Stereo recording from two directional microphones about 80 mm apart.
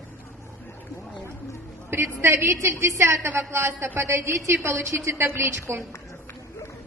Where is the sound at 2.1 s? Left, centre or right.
Right.